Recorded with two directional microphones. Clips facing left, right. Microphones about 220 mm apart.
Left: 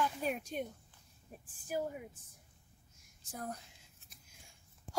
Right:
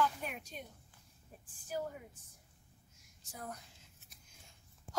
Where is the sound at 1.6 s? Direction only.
15° left (ahead or behind).